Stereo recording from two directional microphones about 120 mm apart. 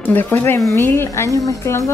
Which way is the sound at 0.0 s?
15° left (ahead or behind).